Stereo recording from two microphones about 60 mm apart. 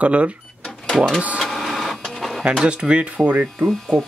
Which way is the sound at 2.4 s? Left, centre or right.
Centre.